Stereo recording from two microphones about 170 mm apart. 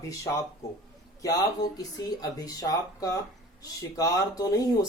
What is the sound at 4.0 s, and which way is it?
Speech, 20° left (ahead or behind).